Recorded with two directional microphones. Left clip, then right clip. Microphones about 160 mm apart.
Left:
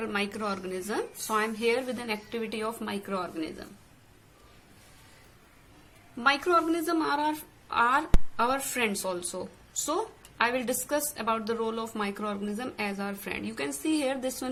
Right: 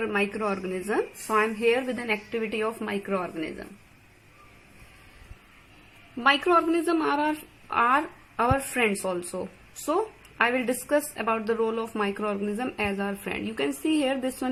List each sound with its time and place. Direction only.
0.0 s a woman's voice: 25° right (ahead or behind)
6.1 s a woman's voice: 25° right (ahead or behind)
13.7 s a woman's voice: 50° right (ahead or behind)
14.0 s a woman's voice: 30° right (ahead or behind)